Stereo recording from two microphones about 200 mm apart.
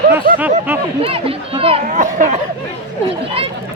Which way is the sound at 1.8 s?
40° right (ahead or behind).